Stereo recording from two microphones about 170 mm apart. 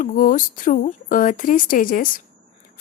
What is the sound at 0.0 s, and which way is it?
A woman's voice, 50° left (ahead or behind).